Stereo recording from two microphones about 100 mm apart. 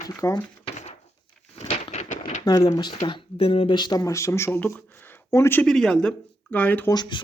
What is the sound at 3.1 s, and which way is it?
Speech, 55° left (ahead or behind).